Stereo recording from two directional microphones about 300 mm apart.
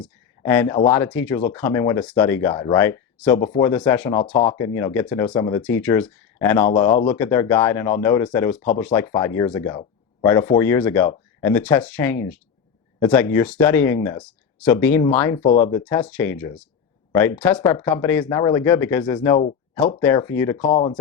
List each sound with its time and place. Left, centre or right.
0.0 s a sound: centre
0.9 s speech: centre
3.3 s speech: left
3.6 s speech: centre
6.7 s speech: left
7.2 s speech: centre
15.4 s speech: left
15.8 s speech: centre
20.6 s speech: left